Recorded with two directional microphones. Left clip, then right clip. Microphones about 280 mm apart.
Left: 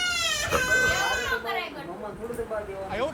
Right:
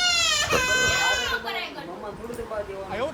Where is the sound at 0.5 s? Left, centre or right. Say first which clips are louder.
Left 3 dB; centre.